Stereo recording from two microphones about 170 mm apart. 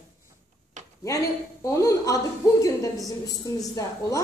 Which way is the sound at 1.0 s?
20° left (ahead or behind).